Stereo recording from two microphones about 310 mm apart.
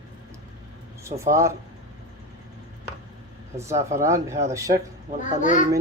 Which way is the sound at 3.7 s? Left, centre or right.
Right.